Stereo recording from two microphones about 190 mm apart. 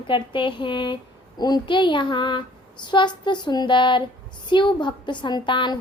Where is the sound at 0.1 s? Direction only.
25° left (ahead or behind).